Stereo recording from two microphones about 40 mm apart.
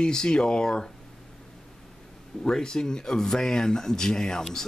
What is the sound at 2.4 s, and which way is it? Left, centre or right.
Speech, centre.